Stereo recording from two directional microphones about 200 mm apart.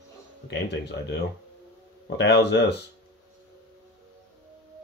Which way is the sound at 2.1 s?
60° left (ahead or behind).